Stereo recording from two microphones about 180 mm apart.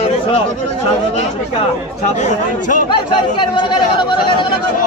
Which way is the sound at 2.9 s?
25° left (ahead or behind).